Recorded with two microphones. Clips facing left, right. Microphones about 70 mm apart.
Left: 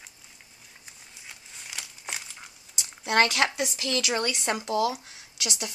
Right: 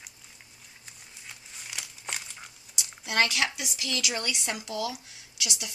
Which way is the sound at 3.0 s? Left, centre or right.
Left.